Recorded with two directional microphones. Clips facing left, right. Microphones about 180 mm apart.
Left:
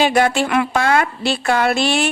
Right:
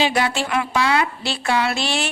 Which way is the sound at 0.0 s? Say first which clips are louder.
Left 5 dB; 50° left (ahead or behind).